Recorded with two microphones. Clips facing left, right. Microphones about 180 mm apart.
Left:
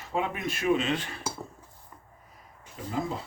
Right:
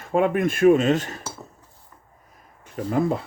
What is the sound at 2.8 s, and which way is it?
Speech, 65° right (ahead or behind).